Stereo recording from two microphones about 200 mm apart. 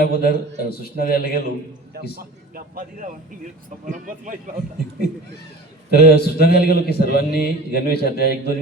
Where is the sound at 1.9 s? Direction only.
55° right (ahead or behind).